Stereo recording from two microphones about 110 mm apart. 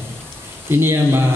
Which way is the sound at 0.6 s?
20° right (ahead or behind).